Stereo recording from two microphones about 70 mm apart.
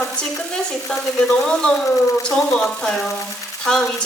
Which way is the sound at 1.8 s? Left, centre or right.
Left.